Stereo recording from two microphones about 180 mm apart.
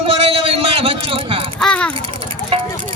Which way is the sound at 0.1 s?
30° right (ahead or behind).